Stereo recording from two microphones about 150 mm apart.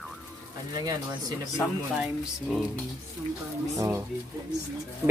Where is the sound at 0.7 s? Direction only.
25° right (ahead or behind).